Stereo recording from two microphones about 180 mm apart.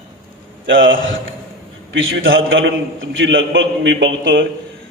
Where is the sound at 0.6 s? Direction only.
90° right.